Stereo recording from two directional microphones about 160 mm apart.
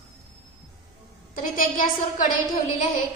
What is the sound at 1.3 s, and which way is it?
Speech, 55° left (ahead or behind).